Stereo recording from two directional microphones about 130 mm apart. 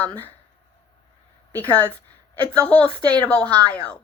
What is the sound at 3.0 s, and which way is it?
Speech, 35° right (ahead or behind).